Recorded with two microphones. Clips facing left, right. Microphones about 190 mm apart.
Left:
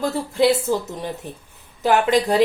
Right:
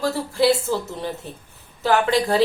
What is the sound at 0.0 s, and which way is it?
A woman's voice, 20° left (ahead or behind).